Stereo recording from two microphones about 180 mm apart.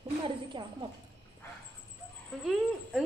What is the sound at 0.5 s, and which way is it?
Speech, 25° right (ahead or behind).